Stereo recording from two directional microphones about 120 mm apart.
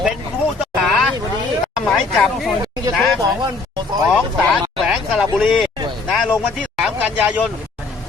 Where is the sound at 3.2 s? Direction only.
35° right (ahead or behind).